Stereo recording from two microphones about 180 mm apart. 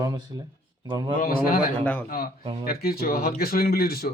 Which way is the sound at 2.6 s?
55° left (ahead or behind).